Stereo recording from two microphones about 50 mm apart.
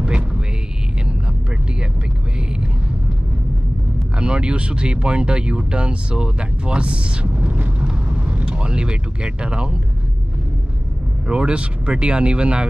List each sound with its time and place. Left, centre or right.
4.2 s speech: centre
11.2 s speech: right